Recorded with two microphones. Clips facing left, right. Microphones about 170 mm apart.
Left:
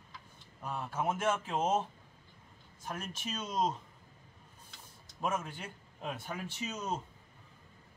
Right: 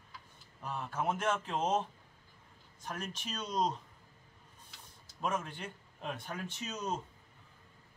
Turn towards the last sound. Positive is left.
turn(degrees=5)  # may be behind; listen again after turning